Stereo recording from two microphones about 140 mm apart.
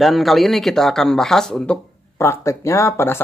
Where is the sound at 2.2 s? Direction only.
20° left (ahead or behind).